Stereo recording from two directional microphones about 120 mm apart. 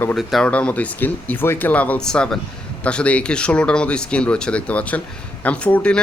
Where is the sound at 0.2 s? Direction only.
Centre (ahead or behind).